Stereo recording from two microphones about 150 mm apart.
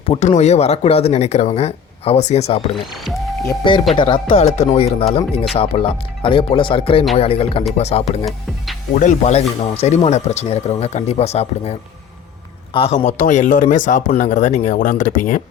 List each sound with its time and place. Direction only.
0.2 s speech: 50° left (ahead or behind)
2.7 s speech: centre (ahead or behind)
3.6 s speech: 30° left (ahead or behind); by 9.4 s 50° left (ahead or behind)
9.6 s speech: 40° left (ahead or behind)
13.1 s speech: 55° left (ahead or behind)